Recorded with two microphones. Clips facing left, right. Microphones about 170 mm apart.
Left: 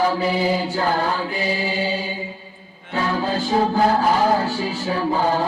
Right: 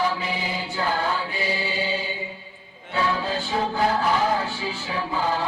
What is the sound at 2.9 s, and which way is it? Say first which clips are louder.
Music: left 3 dB; 40° left (ahead or behind).